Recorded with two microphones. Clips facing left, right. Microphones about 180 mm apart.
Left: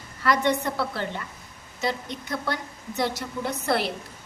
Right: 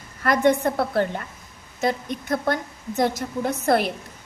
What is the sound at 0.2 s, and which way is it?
A woman's voice, 50° right (ahead or behind).